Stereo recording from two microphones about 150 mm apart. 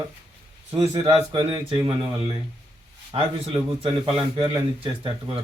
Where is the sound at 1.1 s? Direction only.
35° right (ahead or behind).